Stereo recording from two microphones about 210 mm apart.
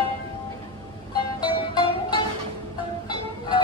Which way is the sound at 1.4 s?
20° left (ahead or behind).